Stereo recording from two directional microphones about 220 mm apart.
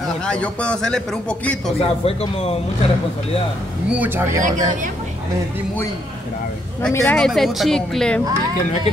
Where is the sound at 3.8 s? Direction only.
5° right (ahead or behind).